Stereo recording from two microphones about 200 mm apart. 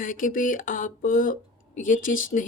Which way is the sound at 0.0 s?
40° left (ahead or behind).